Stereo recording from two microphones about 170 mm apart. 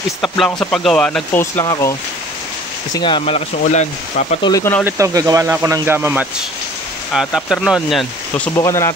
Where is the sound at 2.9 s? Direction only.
30° left (ahead or behind).